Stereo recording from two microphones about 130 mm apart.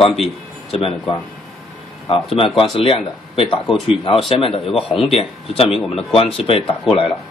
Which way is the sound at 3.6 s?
Centre (ahead or behind).